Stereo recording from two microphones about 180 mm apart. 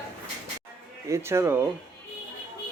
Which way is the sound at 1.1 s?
15° right (ahead or behind).